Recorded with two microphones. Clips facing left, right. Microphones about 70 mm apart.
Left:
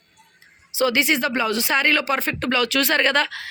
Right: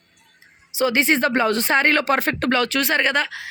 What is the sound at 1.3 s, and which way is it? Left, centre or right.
Speech, right.